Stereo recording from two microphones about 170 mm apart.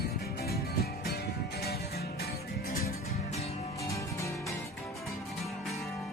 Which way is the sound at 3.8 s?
20° left (ahead or behind).